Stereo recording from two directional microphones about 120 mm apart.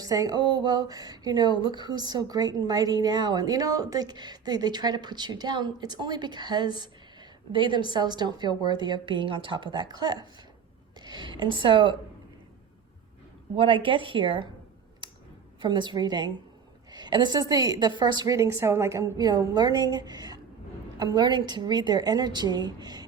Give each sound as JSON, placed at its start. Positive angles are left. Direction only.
{"t": 0.0, "sound": "speech", "side_deg": -30}
{"t": 13.6, "sound": "speech", "side_deg": -45}
{"t": 15.6, "sound": "a woman's voice", "side_deg": -40}